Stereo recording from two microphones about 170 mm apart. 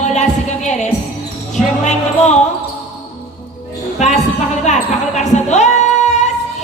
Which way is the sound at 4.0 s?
45° left (ahead or behind).